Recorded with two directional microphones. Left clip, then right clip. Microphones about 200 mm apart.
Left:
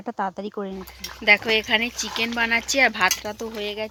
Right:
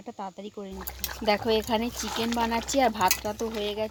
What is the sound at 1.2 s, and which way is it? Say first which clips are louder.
Speech: left 8 dB; 25° left (ahead or behind).